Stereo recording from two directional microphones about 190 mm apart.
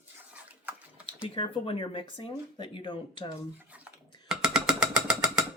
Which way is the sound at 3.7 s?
5° right (ahead or behind).